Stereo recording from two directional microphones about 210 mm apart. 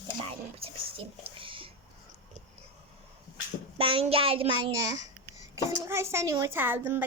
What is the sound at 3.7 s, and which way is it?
A child's voice, 25° right (ahead or behind).